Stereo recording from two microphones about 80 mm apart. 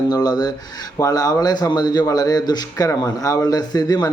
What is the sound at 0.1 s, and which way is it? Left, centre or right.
A man's voice, left.